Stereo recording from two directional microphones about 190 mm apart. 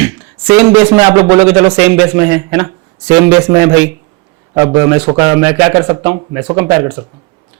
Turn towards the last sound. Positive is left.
turn(degrees=-20)  # may be behind; listen again after turning